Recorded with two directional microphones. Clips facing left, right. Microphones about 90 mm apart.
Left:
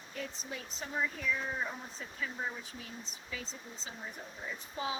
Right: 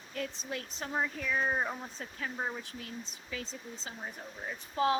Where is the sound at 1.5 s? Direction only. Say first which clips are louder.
Right 5 dB; 50° right (ahead or behind).